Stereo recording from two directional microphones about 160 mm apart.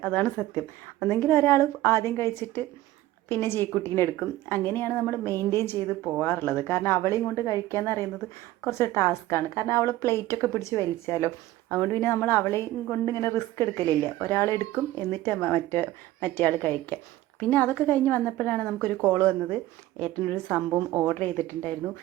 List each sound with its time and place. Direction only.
0.0 s a woman's voice: 10° left (ahead or behind)